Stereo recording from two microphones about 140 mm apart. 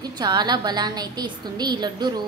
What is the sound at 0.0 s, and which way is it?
A woman's voice, 30° right (ahead or behind).